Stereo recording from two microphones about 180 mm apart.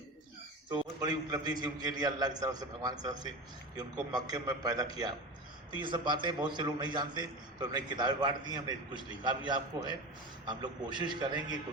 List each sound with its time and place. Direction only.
0.7 s a man's voice: 20° right (ahead or behind)